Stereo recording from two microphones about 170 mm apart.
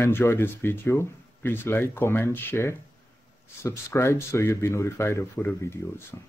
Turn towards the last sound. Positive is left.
turn(degrees=15)  # may be behind; listen again after turning